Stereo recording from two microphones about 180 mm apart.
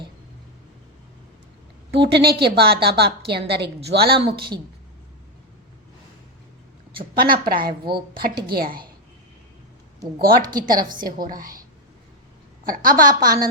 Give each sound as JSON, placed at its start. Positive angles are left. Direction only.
{"t": 1.9, "sound": "a woman's voice", "side_deg": -70}
{"t": 4.1, "sound": "speech", "side_deg": -25}
{"t": 6.9, "sound": "a woman's voice", "side_deg": -55}
{"t": 10.2, "sound": "a woman's voice", "side_deg": -55}
{"t": 12.6, "sound": "a woman's voice", "side_deg": -50}